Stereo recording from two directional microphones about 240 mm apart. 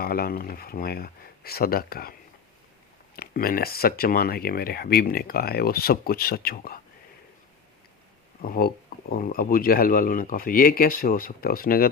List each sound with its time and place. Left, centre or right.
0.0 s speech: left
3.2 s speech: left
8.4 s speech: left